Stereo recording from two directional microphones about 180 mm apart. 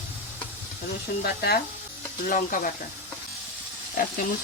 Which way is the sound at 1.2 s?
60° left (ahead or behind).